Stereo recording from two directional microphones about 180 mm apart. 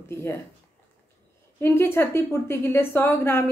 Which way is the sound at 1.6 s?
15° left (ahead or behind).